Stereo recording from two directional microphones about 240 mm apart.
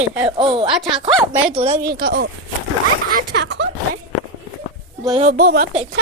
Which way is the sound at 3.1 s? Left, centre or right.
Right.